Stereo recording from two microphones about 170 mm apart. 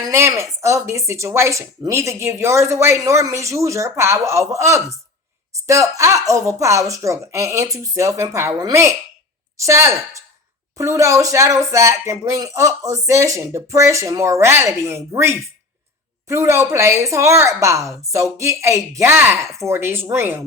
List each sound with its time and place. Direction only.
0.0 s speech: 15° right (ahead or behind)